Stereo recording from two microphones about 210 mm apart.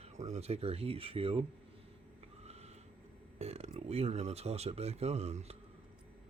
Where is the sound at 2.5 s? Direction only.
30° right (ahead or behind).